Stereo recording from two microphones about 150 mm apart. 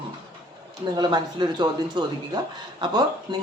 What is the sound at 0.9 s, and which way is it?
Speech, 30° right (ahead or behind).